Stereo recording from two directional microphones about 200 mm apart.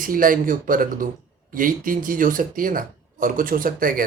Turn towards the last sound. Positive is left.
turn(degrees=-45)  # may be behind; listen again after turning